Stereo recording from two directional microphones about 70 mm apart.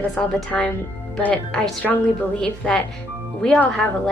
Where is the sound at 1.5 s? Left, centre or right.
Centre.